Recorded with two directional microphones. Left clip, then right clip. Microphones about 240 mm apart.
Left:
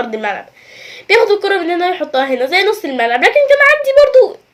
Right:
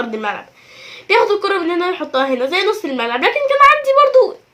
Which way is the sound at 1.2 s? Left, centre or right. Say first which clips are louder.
Left 3 dB; left.